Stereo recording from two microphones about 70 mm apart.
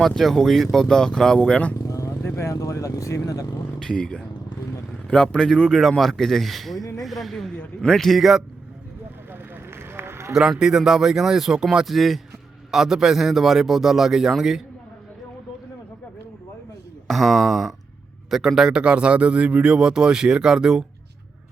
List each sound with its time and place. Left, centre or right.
0.0 s speech: centre
1.9 s vehicle: left
2.2 s speech: left
3.8 s a man's voice: centre
9.3 s vehicle: right
10.3 s a man's voice: centre
17.1 s a man's voice: centre